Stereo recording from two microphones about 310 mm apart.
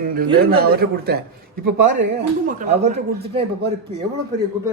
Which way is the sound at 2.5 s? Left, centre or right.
Right.